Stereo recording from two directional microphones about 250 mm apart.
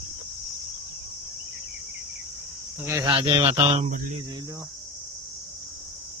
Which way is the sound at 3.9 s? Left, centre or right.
Right.